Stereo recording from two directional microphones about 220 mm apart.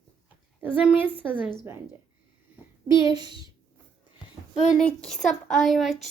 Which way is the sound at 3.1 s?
20° right (ahead or behind).